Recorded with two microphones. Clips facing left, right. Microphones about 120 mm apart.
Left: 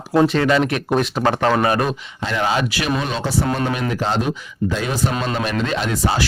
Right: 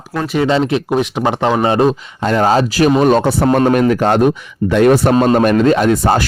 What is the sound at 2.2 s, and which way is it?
Speech, 45° right (ahead or behind).